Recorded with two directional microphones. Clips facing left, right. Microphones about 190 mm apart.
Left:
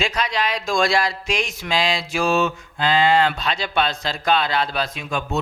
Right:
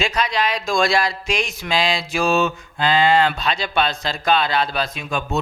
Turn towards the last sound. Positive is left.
turn(degrees=-20)  # may be behind; listen again after turning